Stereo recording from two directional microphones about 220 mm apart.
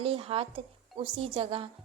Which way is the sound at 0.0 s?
25° right (ahead or behind).